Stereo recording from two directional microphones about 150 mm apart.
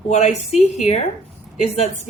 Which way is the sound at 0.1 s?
45° left (ahead or behind).